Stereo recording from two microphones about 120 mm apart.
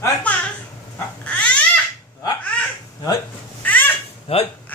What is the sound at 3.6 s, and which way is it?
Babbling, 15° left (ahead or behind).